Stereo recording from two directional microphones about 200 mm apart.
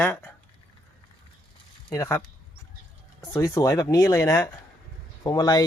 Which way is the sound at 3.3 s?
15° left (ahead or behind).